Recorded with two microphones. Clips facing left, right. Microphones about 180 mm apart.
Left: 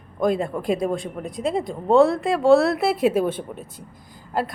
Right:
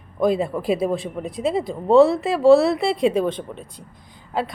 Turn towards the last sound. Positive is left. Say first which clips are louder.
# even
turn(degrees=0)  # may be behind; listen again after turning